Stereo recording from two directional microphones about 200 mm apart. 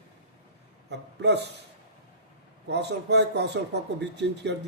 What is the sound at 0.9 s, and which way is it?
Speech, 60° right (ahead or behind).